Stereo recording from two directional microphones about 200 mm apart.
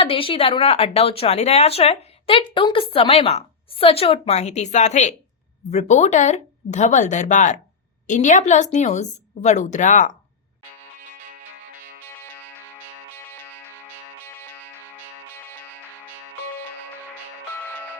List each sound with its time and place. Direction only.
0.0 s a woman's voice: 25° left (ahead or behind)
12.0 s music: 10° left (ahead or behind)